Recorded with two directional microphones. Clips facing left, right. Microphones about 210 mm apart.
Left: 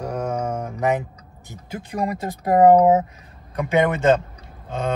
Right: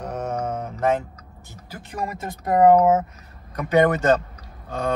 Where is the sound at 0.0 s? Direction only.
10° left (ahead or behind).